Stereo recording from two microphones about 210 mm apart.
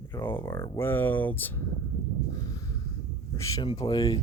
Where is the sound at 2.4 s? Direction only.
15° left (ahead or behind).